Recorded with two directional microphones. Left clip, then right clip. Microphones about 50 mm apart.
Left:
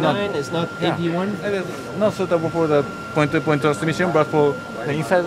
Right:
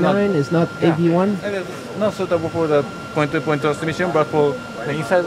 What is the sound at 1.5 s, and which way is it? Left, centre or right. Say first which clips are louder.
Speech: left 1 dB; centre.